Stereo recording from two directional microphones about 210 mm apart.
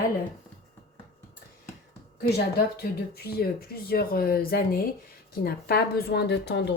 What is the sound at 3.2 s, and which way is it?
A woman's voice, 50° left (ahead or behind).